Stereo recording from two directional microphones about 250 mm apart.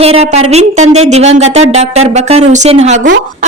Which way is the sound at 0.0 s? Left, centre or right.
Right.